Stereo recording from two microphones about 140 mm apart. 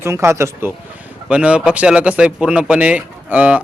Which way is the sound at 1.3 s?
10° right (ahead or behind).